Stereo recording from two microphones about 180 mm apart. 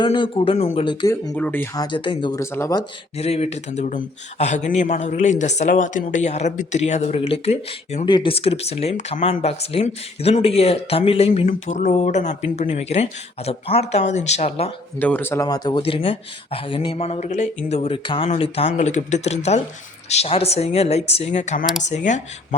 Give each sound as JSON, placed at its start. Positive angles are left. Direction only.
{"t": 0.0, "sound": "speech", "side_deg": 25}
{"t": 1.0, "sound": "speech", "side_deg": 20}
{"t": 1.3, "sound": "speech", "side_deg": 10}
{"t": 1.7, "sound": "speech", "side_deg": 25}
{"t": 2.4, "sound": "speech", "side_deg": 15}
{"t": 3.2, "sound": "speech", "side_deg": 35}
{"t": 8.0, "sound": "speech", "side_deg": 25}
{"t": 11.4, "sound": "speech", "side_deg": 45}
{"t": 14.9, "sound": "speech", "side_deg": 10}